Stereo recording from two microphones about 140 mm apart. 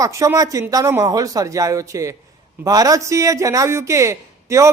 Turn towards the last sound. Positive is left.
turn(degrees=-20)  # may be behind; listen again after turning